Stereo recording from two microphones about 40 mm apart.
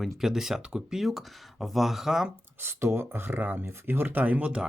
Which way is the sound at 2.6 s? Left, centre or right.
Right.